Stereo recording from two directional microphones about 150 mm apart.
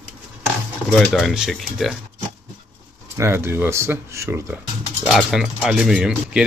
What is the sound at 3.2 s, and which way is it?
Speech, 15° right (ahead or behind).